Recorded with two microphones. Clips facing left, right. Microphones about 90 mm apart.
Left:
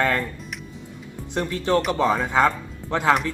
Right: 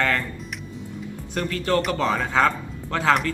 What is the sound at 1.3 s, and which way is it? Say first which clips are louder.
Speech: left 2 dB; 20° left (ahead or behind).